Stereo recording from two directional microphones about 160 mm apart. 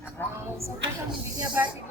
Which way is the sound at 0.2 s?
15° left (ahead or behind).